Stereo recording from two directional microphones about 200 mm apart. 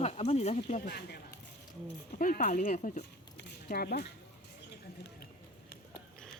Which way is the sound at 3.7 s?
50° left (ahead or behind).